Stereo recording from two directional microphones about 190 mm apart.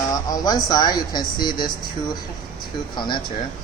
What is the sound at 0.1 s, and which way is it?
Speech, 20° left (ahead or behind).